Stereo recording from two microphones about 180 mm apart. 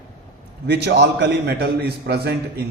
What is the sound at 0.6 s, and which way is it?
A man's voice, 70° right (ahead or behind).